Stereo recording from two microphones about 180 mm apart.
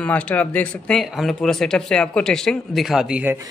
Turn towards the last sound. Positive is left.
turn(degrees=-5)  # may be behind; listen again after turning